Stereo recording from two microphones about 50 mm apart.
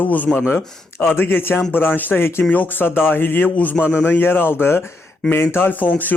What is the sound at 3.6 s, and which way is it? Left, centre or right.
A man's voice, left.